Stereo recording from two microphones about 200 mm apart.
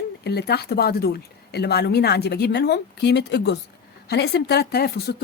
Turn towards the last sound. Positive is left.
turn(degrees=55)  # may be behind; listen again after turning